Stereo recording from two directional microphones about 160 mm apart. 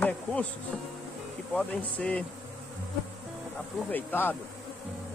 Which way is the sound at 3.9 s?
10° left (ahead or behind).